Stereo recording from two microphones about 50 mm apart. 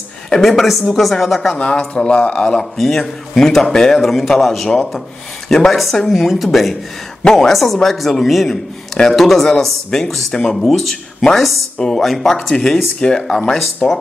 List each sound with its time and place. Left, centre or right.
0.4 s a man's voice: centre
1.6 s a man's voice: left
3.0 s a man's voice: centre